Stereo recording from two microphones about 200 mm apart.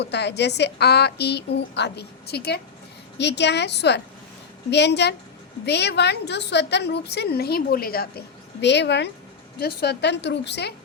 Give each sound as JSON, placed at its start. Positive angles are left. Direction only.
{"t": 0.0, "sound": "a woman's voice", "side_deg": 60}
{"t": 8.6, "sound": "a woman's voice", "side_deg": 60}